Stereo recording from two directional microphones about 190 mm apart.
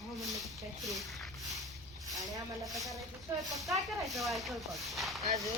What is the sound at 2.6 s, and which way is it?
Speech, centre (ahead or behind).